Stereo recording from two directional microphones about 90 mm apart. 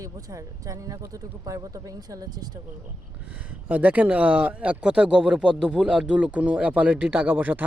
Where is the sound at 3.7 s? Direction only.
15° right (ahead or behind).